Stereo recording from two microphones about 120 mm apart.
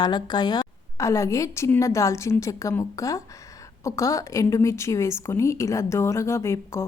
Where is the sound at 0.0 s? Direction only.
35° left (ahead or behind).